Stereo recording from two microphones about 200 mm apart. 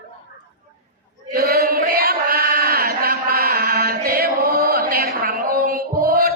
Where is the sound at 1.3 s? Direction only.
50° right (ahead or behind).